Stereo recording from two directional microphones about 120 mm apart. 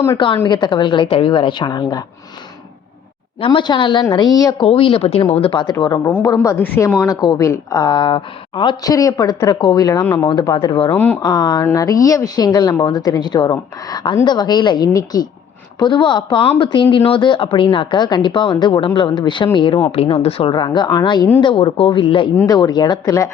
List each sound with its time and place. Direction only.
0.4 s a woman's voice: 40° left (ahead or behind)
3.4 s a woman's voice: 45° left (ahead or behind)
4.6 s speech: 50° left (ahead or behind)
6.2 s a woman's voice: 25° left (ahead or behind)
8.9 s a woman's voice: 30° left (ahead or behind)
10.0 s speech: 15° left (ahead or behind)
10.4 s a woman's voice: 35° left (ahead or behind)
10.9 s speech: 15° left (ahead or behind)
11.2 s a woman's voice: 35° left (ahead or behind); by 20.5 s 55° left (ahead or behind)
20.5 s a woman's voice: 35° left (ahead or behind)
21.4 s speech: 50° left (ahead or behind)
22.4 s a woman's voice: 35° left (ahead or behind)